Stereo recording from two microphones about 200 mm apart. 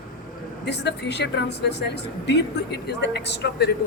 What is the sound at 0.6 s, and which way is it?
Speech, 60° left (ahead or behind).